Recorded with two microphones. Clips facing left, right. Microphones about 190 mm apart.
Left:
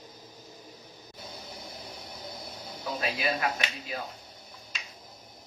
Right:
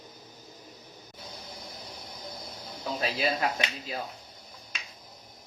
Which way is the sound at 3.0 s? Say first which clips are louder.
Right 1 dB; 30° right (ahead or behind).